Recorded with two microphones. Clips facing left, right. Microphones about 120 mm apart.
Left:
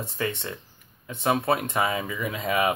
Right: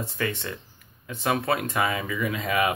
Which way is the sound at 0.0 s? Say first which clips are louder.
Even; 20° left (ahead or behind).